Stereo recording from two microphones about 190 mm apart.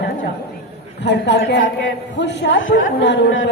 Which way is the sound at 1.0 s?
65° left (ahead or behind).